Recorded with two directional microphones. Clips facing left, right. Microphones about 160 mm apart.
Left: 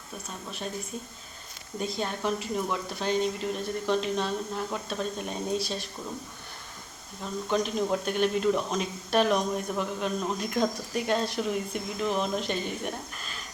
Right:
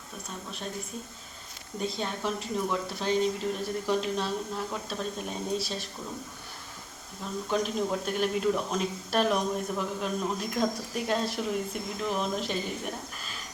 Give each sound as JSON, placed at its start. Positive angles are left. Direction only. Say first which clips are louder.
{"t": 0.2, "sound": "speech", "louder": "left 1 dB", "side_deg": 0}
{"t": 1.8, "sound": "speech", "louder": "left 1 dB", "side_deg": 5}
{"t": 7.5, "sound": "speech", "louder": "left 2 dB", "side_deg": -5}